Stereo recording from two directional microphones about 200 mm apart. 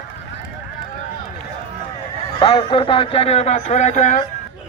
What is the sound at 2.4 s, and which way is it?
Speech, 25° left (ahead or behind).